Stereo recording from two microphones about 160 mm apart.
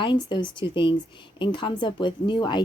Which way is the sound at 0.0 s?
30° left (ahead or behind).